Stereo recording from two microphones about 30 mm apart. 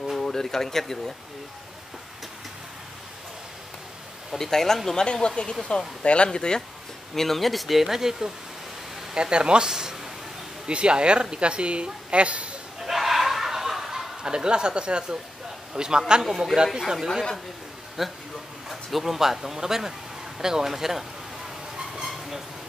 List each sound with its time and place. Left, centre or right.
0.2 s speech: centre
4.4 s speech: centre
4.9 s speech: left
7.2 s speech: centre
9.1 s speech: right
10.7 s a woman's voice: right
12.8 s laughter: centre
14.2 s speech: right
16.2 s a man's voice: centre
21.7 s a sound: right